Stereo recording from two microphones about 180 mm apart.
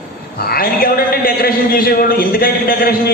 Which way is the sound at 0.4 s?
55° left (ahead or behind).